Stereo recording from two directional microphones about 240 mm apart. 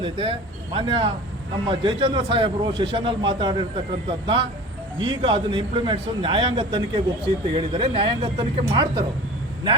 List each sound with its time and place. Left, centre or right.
0.0 s a man's voice: right
5.0 s a man's voice: centre